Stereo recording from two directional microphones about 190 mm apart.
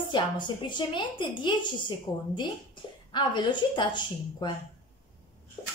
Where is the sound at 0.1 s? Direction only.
25° left (ahead or behind).